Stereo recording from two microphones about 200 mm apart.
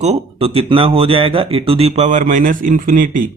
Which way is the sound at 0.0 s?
30° right (ahead or behind).